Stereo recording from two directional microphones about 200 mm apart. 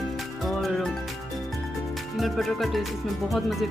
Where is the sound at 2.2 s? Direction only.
Centre (ahead or behind).